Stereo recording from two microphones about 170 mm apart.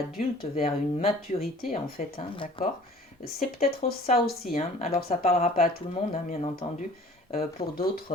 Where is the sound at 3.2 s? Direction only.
55° left (ahead or behind).